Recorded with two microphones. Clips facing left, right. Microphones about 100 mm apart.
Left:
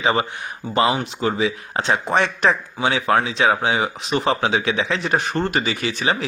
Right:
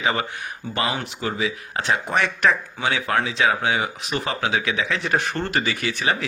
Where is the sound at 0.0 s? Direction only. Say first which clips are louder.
Left 4 dB; 25° left (ahead or behind).